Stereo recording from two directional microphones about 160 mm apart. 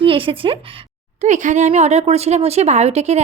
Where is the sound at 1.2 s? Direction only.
50° right (ahead or behind).